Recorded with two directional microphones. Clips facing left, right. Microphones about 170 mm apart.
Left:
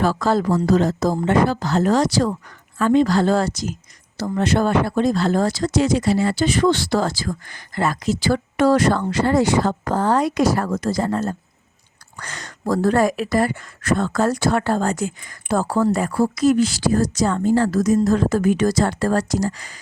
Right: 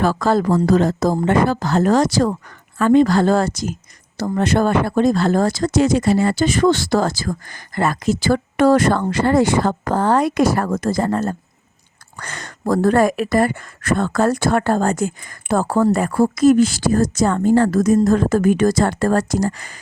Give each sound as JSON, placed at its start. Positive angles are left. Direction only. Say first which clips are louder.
{"t": 0.0, "sound": "speech", "louder": "right 2 dB", "side_deg": -55}